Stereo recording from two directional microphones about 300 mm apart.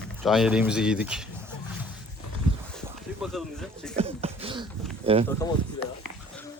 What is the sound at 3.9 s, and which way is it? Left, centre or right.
Beatboxing, centre.